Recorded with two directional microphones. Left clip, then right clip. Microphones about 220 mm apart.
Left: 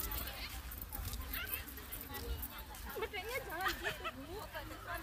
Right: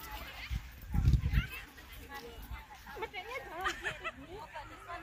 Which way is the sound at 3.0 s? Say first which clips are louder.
Even; 55° left (ahead or behind).